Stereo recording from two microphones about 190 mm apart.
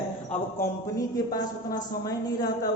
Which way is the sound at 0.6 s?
20° left (ahead or behind).